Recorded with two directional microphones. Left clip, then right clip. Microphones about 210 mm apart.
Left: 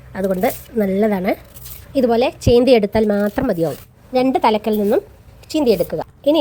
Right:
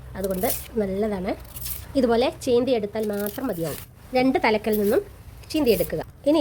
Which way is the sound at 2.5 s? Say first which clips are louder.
Left 12 dB; 30° left (ahead or behind).